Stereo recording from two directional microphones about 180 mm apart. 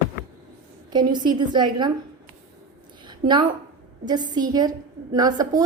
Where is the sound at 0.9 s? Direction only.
25° right (ahead or behind).